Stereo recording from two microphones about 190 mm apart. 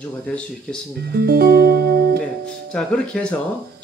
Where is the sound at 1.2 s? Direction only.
55° right (ahead or behind).